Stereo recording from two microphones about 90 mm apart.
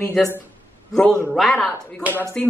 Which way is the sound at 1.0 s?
10° left (ahead or behind).